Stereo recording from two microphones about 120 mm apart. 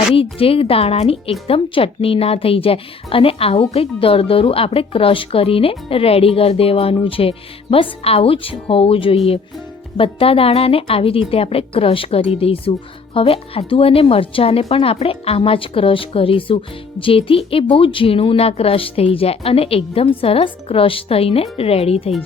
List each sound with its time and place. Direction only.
0.1 s speech: 50° left (ahead or behind)